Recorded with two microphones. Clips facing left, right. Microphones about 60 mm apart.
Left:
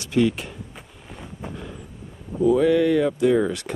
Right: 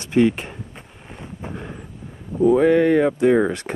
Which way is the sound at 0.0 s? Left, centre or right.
Right.